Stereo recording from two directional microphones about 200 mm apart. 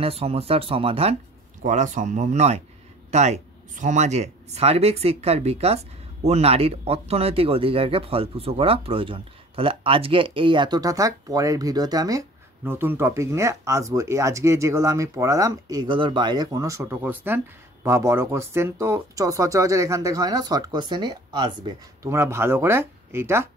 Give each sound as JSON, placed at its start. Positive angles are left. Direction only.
{"t": 0.0, "sound": "speech", "side_deg": -30}